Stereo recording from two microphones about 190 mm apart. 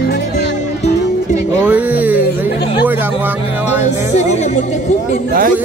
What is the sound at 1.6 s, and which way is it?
Music, 10° right (ahead or behind).